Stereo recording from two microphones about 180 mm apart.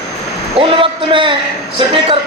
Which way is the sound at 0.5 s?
30° right (ahead or behind).